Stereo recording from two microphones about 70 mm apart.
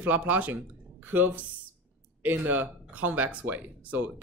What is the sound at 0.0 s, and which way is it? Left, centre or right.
Speech, right.